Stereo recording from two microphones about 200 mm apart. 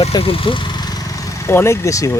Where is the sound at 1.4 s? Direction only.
15° left (ahead or behind).